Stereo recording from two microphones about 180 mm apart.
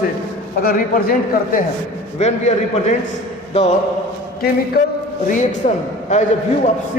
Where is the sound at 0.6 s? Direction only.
55° left (ahead or behind).